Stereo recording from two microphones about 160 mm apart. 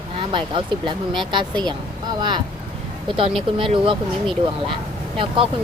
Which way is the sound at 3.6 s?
30° right (ahead or behind).